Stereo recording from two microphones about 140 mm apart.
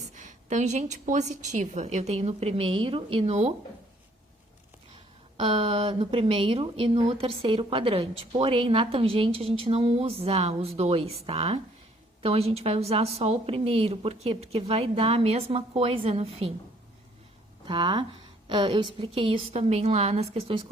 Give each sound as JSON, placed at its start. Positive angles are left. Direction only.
{"t": 0.1, "sound": "a woman's voice", "side_deg": -60}
{"t": 5.4, "sound": "a woman's voice", "side_deg": -40}
{"t": 17.7, "sound": "a woman's voice", "side_deg": -35}